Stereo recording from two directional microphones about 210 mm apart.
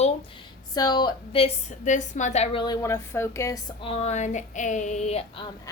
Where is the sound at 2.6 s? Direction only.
15° left (ahead or behind).